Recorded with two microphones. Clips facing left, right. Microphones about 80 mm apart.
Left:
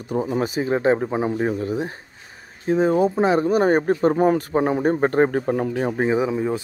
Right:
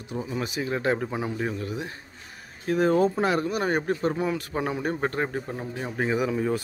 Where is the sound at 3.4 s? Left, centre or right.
Left.